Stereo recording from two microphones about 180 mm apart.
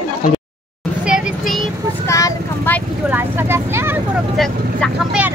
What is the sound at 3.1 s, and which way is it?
Vehicle, 15° right (ahead or behind).